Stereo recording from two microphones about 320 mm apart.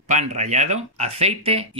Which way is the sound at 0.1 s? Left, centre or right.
Right.